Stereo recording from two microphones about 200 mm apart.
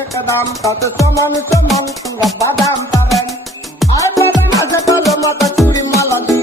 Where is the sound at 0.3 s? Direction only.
15° left (ahead or behind).